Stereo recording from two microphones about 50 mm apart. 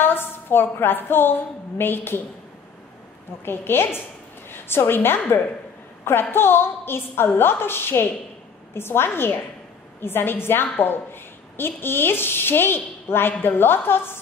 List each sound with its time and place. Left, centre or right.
0.0 s a woman's voice: left
3.4 s a woman's voice: left
6.3 s a woman's voice: left